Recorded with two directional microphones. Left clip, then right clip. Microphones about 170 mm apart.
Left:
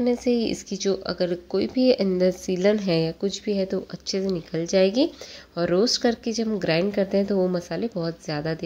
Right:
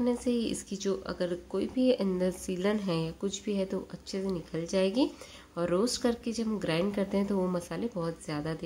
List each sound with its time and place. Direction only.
0.0 s speech: 25° left (ahead or behind)